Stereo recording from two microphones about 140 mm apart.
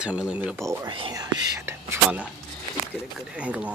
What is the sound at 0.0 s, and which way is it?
Speech, 10° right (ahead or behind).